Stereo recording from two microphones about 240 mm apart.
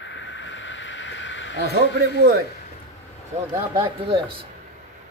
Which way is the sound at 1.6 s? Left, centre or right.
Right.